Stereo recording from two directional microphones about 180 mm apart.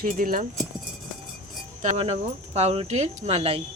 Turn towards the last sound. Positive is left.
turn(degrees=-35)  # may be behind; listen again after turning